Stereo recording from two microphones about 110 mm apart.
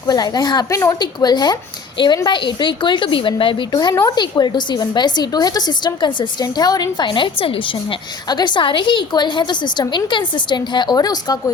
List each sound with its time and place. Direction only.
0.1 s a woman's voice: 35° left (ahead or behind)
0.9 s a woman's voice: 40° left (ahead or behind)
3.7 s a woman's voice: 35° left (ahead or behind)